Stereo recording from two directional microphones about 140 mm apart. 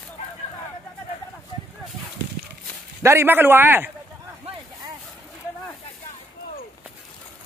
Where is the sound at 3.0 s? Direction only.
20° right (ahead or behind).